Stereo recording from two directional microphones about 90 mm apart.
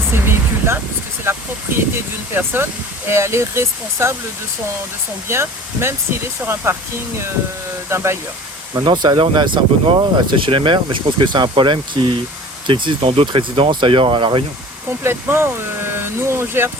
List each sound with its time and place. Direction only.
0.1 s speech: 25° right (ahead or behind)
5.3 s speech: 30° right (ahead or behind)
7.9 s speech: 30° right (ahead or behind)
8.8 s speech: 55° right (ahead or behind)
15.0 s speech: 25° right (ahead or behind)